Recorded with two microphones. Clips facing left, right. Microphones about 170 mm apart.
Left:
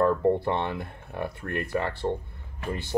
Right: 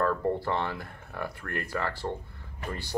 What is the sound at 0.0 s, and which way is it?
Speech, 20° left (ahead or behind).